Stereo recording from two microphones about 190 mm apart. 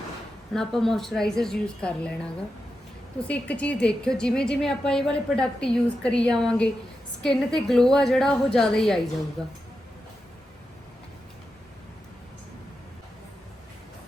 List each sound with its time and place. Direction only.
0.5 s a woman's voice: centre (ahead or behind)